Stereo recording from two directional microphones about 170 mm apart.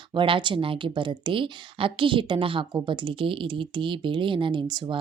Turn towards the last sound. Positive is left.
turn(degrees=-25)  # may be behind; listen again after turning